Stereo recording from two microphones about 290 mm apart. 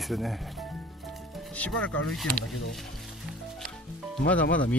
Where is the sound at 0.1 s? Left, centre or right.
Centre.